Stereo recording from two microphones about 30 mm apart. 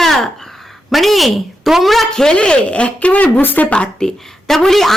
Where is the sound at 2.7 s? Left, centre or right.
Left.